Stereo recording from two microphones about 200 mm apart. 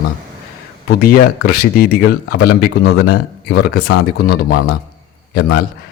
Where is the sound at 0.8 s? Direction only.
50° left (ahead or behind).